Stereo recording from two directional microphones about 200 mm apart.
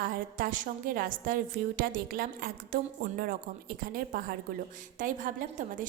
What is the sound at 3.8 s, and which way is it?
A woman's voice, 45° right (ahead or behind).